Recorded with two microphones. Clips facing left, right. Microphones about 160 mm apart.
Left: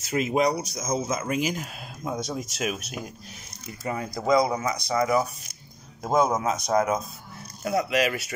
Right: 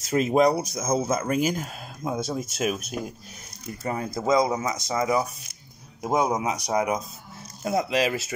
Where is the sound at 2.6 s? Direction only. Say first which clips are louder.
Right 5 dB; 40° right (ahead or behind).